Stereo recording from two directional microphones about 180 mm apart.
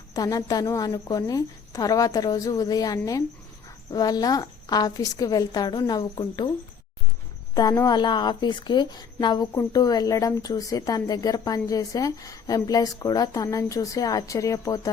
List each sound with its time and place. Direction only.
0.1 s a woman's voice: 20° left (ahead or behind)
7.5 s a woman's voice: 20° left (ahead or behind)